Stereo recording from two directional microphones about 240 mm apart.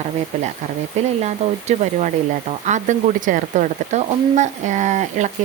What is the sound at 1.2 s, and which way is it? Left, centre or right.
Speech, right.